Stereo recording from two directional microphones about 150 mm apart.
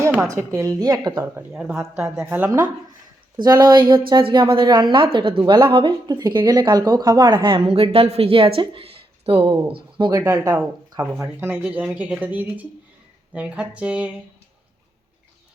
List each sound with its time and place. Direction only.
0.1 s speech: 20° right (ahead or behind)
1.2 s speech: 10° right (ahead or behind)
3.3 s a woman's voice: 25° right (ahead or behind)
10.0 s speech: 20° right (ahead or behind)